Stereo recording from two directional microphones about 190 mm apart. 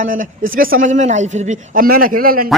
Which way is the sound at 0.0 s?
45° right (ahead or behind).